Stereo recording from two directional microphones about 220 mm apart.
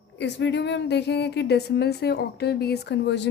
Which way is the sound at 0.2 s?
50° left (ahead or behind).